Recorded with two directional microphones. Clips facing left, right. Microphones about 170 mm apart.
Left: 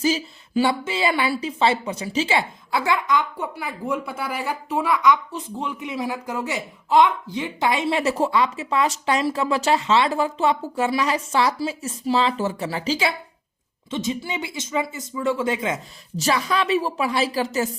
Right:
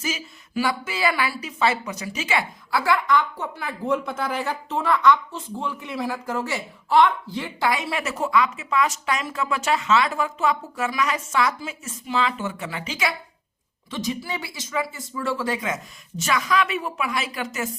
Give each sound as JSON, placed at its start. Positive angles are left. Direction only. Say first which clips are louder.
{"t": 0.0, "sound": "a woman's voice", "louder": "left 8 dB", "side_deg": 30}